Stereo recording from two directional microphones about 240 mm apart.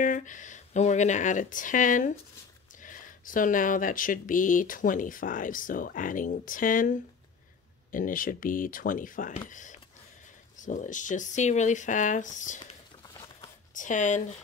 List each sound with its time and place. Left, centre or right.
0.0 s speech: left
13.0 s a sound: centre
13.7 s speech: left